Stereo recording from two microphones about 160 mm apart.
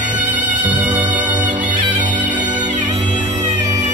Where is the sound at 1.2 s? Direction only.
50° right (ahead or behind).